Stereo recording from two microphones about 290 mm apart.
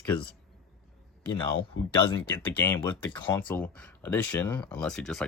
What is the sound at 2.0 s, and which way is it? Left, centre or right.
Speech, centre.